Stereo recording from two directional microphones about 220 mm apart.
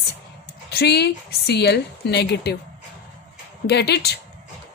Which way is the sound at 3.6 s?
50° left (ahead or behind).